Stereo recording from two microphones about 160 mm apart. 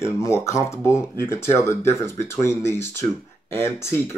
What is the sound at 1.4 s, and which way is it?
Speech, 15° left (ahead or behind).